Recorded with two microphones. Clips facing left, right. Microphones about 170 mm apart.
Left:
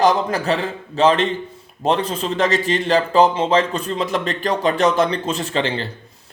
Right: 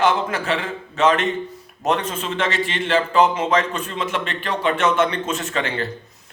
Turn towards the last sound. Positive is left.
turn(degrees=30)  # may be behind; listen again after turning